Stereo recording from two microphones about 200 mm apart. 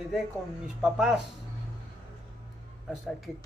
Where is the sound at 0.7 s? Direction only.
5° right (ahead or behind).